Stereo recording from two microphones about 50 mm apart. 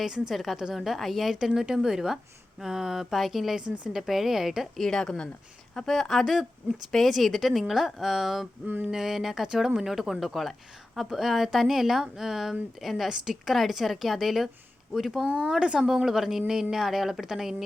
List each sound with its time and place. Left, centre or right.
0.0 s a woman's voice: centre
4.8 s a woman's voice: centre
5.7 s speech: centre
8.6 s a sound: right
8.9 s a woman's voice: centre
15.4 s speech: centre
15.9 s a woman's voice: centre